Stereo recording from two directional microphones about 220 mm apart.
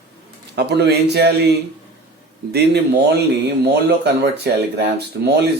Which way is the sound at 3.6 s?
50° right (ahead or behind).